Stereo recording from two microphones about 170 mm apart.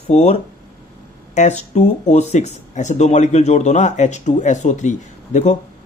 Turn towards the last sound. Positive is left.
turn(degrees=45)  # may be behind; listen again after turning